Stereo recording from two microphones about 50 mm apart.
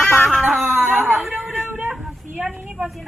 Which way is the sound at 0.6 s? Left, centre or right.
Right.